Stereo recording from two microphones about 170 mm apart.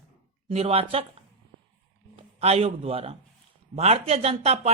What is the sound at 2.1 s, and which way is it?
A man's voice, 40° right (ahead or behind).